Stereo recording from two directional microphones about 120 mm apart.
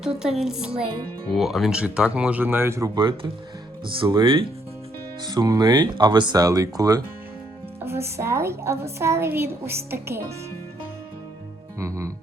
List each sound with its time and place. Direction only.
0.0 s speech: 5° right (ahead or behind); by 3.2 s 35° right (ahead or behind)
4.2 s speech: 45° right (ahead or behind)
5.2 s a woman's voice: 35° right (ahead or behind)
11.8 s music: 25° right (ahead or behind)